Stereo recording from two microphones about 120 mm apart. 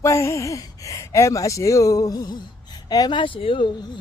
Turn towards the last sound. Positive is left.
turn(degrees=50)  # may be behind; listen again after turning